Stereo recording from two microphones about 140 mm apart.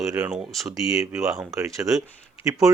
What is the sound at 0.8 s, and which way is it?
Speech, 45° left (ahead or behind).